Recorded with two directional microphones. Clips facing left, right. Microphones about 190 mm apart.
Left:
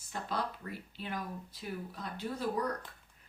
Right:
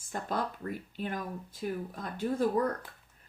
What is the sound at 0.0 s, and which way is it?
Speech, 50° right (ahead or behind).